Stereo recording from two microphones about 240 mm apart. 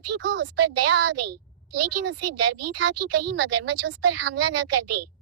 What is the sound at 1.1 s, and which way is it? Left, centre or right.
A woman's voice, right.